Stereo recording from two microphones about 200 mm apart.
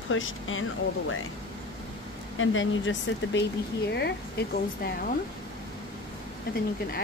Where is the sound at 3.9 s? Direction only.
55° left (ahead or behind).